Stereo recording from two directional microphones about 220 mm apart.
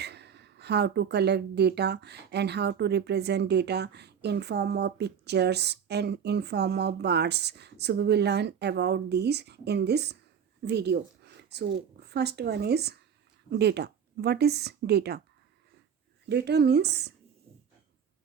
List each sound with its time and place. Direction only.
0.0 s speech: 50° right (ahead or behind)
16.3 s speech: 50° right (ahead or behind)